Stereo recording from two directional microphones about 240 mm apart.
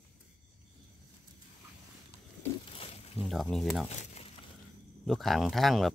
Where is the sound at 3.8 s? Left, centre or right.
Left.